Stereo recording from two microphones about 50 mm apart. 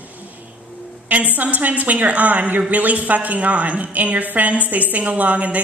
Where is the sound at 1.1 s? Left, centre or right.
Right.